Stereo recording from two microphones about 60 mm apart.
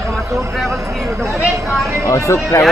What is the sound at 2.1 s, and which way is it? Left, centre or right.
Speech, left.